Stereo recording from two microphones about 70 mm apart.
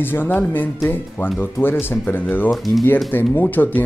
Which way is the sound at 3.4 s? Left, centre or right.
Left.